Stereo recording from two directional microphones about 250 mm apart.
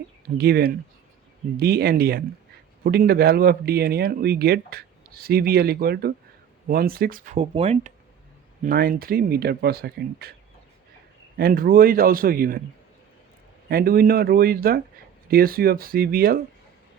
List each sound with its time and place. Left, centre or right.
0.3 s speech: right
8.6 s speech: right
11.3 s speech: right
13.7 s speech: right